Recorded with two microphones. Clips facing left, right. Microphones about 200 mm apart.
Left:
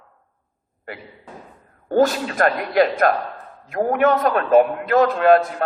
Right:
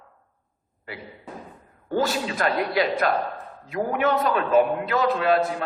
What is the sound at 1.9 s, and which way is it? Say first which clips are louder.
A man's voice: left 7 dB; 55° left (ahead or behind).